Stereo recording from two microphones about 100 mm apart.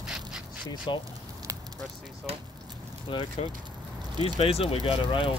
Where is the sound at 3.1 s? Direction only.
60° left (ahead or behind).